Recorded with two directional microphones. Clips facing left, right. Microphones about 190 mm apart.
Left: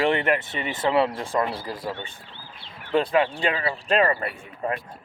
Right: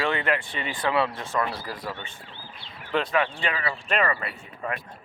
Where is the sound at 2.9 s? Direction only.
30° left (ahead or behind).